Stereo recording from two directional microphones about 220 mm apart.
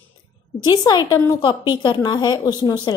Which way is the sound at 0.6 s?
20° left (ahead or behind).